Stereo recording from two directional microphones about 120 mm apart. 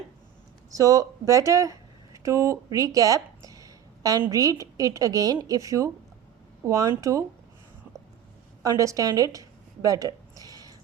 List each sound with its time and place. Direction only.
0.7 s a woman's voice: 30° right (ahead or behind)
8.6 s a woman's voice: 25° right (ahead or behind)